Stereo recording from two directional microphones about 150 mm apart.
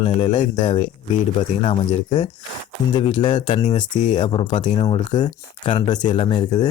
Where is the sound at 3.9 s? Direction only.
55° left (ahead or behind).